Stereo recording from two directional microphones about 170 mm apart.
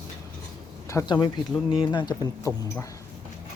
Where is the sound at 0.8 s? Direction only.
20° left (ahead or behind).